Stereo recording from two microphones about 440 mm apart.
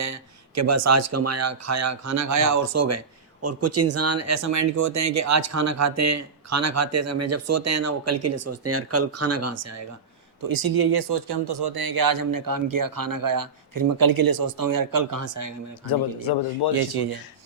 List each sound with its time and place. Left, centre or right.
0.0 s speech: right
10.4 s speech: right
15.9 s a man's voice: left